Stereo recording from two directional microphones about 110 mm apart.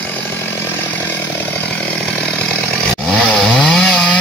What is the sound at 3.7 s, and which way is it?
Chainsaw, 5° left (ahead or behind).